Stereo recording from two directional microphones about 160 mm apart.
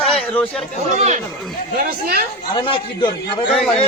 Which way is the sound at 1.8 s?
65° right (ahead or behind).